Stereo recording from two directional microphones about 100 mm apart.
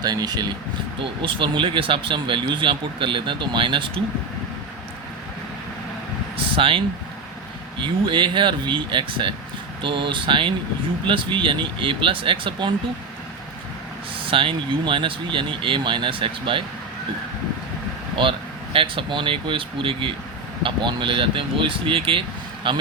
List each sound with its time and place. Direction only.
0.0 s speech: 40° right (ahead or behind)
1.2 s speech: 60° right (ahead or behind)
6.3 s vehicle: 65° right (ahead or behind)
7.8 s speech: 55° right (ahead or behind)
14.3 s speech: 60° right (ahead or behind)
18.2 s speech: 60° right (ahead or behind)